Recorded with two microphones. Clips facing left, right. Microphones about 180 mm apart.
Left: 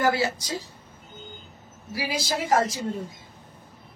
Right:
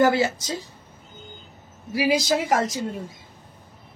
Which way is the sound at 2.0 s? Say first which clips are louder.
Right 4 dB; 20° right (ahead or behind).